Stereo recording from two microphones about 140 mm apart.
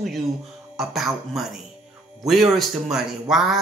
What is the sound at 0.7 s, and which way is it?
Speech, centre (ahead or behind).